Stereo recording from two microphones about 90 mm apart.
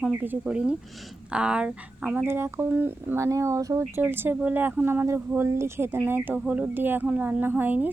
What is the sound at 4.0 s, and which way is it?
A woman's voice, 25° right (ahead or behind).